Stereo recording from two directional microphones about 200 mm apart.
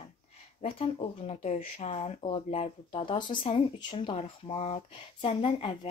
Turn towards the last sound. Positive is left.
turn(degrees=25)  # may be behind; listen again after turning